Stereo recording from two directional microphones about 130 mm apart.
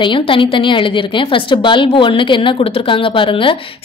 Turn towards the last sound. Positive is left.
turn(degrees=40)  # may be behind; listen again after turning